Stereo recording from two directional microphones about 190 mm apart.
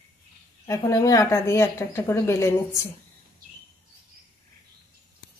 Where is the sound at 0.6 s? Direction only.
15° left (ahead or behind).